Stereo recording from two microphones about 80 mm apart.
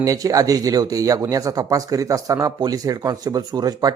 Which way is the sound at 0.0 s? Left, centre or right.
Right.